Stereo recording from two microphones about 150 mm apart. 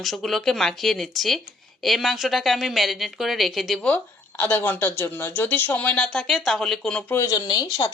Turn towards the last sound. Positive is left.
turn(degrees=25)  # may be behind; listen again after turning